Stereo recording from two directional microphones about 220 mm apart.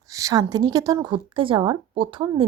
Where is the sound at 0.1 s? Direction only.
15° right (ahead or behind).